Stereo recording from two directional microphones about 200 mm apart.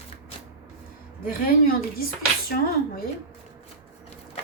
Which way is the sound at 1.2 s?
45° left (ahead or behind).